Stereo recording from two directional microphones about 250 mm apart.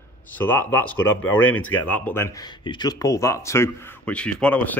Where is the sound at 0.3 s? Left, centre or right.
Centre.